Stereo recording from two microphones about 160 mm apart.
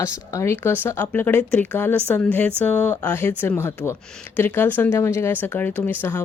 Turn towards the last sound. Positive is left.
turn(degrees=10)  # may be behind; listen again after turning